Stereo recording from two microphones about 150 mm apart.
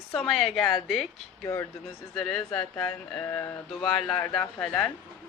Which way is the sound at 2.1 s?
5° left (ahead or behind).